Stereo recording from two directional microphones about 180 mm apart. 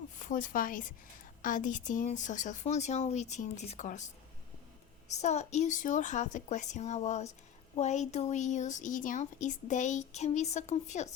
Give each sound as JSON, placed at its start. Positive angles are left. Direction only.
{"t": 0.2, "sound": "speech", "side_deg": 45}
{"t": 5.2, "sound": "a woman's voice", "side_deg": 40}